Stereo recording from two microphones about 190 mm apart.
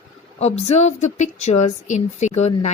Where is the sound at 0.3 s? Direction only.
35° left (ahead or behind).